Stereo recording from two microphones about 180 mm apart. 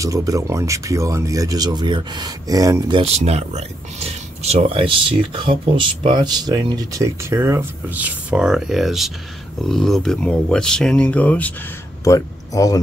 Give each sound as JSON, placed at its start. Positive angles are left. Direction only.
{"t": 0.0, "sound": "speech", "side_deg": -20}
{"t": 3.0, "sound": "speech", "side_deg": -35}